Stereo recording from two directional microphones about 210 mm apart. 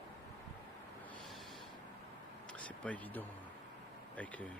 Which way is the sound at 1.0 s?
Centre (ahead or behind).